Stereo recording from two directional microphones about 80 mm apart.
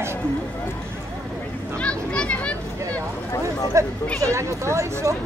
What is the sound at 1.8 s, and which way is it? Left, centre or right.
Children playing, centre.